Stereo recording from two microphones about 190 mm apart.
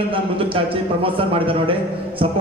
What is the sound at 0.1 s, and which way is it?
A man's voice, 30° right (ahead or behind).